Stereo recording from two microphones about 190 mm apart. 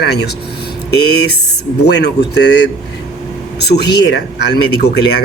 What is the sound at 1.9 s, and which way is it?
Speech, 60° left (ahead or behind).